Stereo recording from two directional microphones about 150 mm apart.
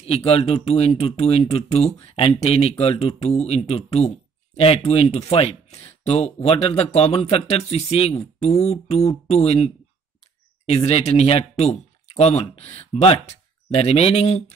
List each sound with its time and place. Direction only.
0.0 s speech: 40° left (ahead or behind)
10.7 s speech: 40° left (ahead or behind)